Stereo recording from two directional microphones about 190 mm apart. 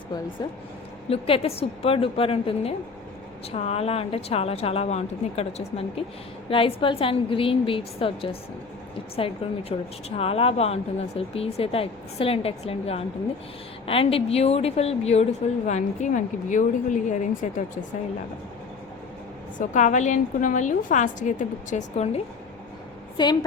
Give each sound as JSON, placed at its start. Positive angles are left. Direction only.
{"t": 1.1, "sound": "a woman's voice", "side_deg": 30}
{"t": 19.5, "sound": "a woman's voice", "side_deg": 40}
{"t": 23.1, "sound": "a woman's voice", "side_deg": 25}